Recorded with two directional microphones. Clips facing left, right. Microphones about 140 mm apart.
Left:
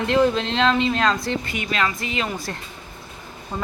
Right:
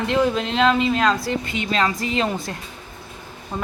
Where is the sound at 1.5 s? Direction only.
30° right (ahead or behind).